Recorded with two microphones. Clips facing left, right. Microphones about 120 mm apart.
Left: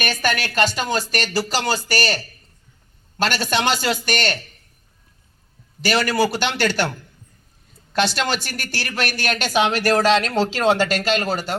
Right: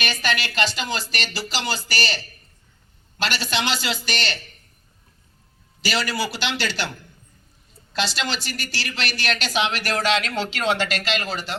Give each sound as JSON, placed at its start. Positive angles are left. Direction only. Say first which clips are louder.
{"t": 0.0, "sound": "speech", "louder": "left 3 dB", "side_deg": 50}
{"t": 5.8, "sound": "speech", "louder": "left 6 dB", "side_deg": 55}
{"t": 7.9, "sound": "speech", "louder": "left 5 dB", "side_deg": 55}